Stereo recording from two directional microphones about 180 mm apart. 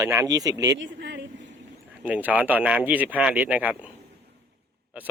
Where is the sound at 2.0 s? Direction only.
10° right (ahead or behind).